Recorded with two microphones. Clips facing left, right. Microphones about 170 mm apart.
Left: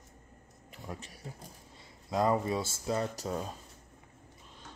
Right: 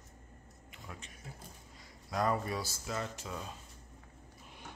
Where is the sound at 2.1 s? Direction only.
25° left (ahead or behind); by 3.5 s 40° left (ahead or behind).